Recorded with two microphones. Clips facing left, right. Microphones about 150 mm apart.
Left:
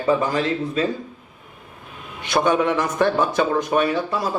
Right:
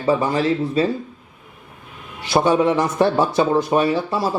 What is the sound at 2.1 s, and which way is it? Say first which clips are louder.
A man's voice: right 2 dB; 30° right (ahead or behind).